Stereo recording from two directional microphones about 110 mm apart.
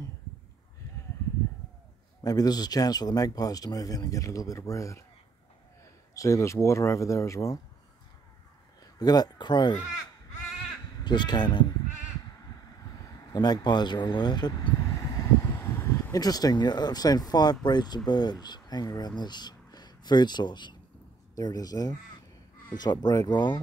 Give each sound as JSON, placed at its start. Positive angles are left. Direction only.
{"t": 2.2, "sound": "speech", "side_deg": 35}
{"t": 6.1, "sound": "speech", "side_deg": 30}
{"t": 9.0, "sound": "speech", "side_deg": 40}
{"t": 11.1, "sound": "speech", "side_deg": 40}
{"t": 13.3, "sound": "speech", "side_deg": 40}
{"t": 15.6, "sound": "a sound", "side_deg": 20}
{"t": 16.2, "sound": "speech", "side_deg": 35}